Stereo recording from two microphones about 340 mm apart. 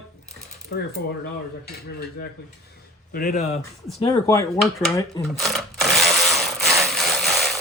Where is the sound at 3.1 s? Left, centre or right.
Left.